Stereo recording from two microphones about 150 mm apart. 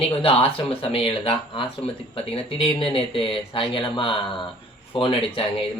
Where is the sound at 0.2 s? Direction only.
40° left (ahead or behind).